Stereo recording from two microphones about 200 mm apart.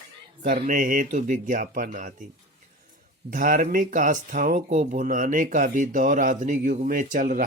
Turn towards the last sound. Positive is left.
turn(degrees=-40)  # may be behind; listen again after turning